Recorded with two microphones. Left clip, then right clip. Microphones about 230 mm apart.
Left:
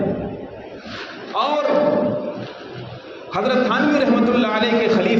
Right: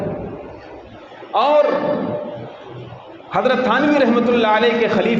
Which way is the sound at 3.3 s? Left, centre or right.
Right.